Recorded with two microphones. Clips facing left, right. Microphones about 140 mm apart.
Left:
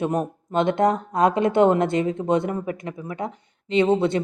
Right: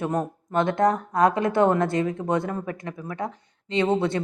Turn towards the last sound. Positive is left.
turn(degrees=20)  # may be behind; listen again after turning